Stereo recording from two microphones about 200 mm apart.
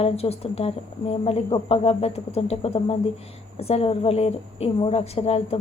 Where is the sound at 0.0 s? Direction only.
30° left (ahead or behind).